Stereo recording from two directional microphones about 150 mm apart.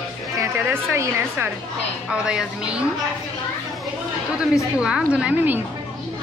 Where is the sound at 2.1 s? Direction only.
5° right (ahead or behind).